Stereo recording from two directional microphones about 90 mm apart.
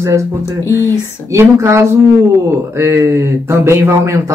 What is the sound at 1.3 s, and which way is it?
Speech, 35° right (ahead or behind).